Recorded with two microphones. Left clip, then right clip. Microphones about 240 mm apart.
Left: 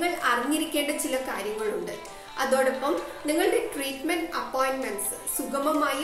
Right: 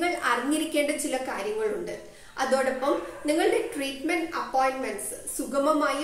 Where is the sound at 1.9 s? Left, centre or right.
Centre.